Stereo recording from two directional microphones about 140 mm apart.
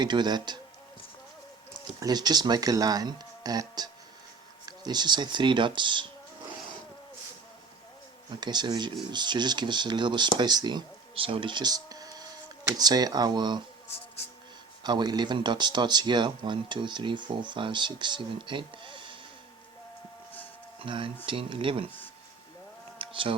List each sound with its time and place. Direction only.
0.0 s speech: 30° right (ahead or behind)
1.7 s speech: 30° right (ahead or behind)
8.4 s speech: 30° right (ahead or behind)
14.8 s speech: 30° right (ahead or behind)
20.7 s speech: 40° right (ahead or behind)
23.0 s a sound: 40° right (ahead or behind)